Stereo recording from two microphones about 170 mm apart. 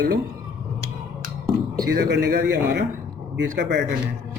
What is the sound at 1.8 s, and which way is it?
Speech, 90° right.